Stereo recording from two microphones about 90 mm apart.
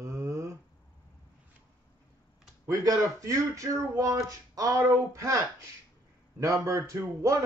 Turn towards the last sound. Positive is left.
turn(degrees=-35)  # may be behind; listen again after turning